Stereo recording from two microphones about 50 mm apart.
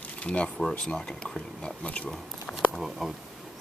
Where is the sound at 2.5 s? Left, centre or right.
Left.